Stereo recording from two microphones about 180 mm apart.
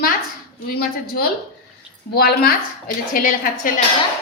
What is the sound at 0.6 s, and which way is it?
A woman's voice, 55° left (ahead or behind).